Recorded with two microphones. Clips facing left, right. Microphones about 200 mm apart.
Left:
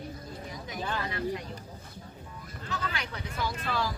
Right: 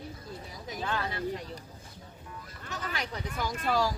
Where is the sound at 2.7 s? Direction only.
40° right (ahead or behind).